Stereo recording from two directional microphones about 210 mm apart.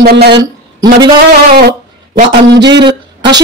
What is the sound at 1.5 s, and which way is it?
Speech, 50° right (ahead or behind).